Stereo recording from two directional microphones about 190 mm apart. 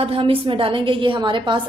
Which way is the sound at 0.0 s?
30° right (ahead or behind).